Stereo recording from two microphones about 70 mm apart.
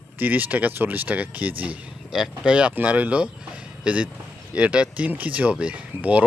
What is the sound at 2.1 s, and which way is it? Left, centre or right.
Speech, centre.